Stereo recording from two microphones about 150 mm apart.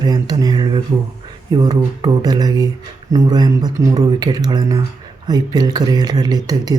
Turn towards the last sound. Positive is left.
turn(degrees=-25)  # may be behind; listen again after turning